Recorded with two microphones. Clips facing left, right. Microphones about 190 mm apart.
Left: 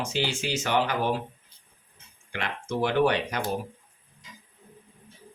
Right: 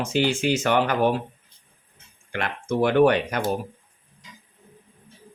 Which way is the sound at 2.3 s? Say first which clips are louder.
Right 5 dB; 50° right (ahead or behind).